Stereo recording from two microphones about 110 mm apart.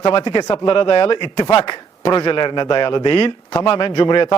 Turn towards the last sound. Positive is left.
turn(degrees=45)  # may be behind; listen again after turning